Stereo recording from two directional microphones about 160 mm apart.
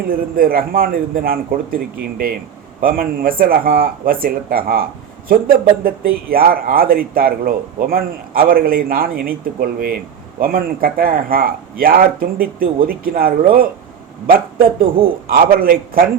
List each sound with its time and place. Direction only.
0.1 s a man's voice: 65° right (ahead or behind)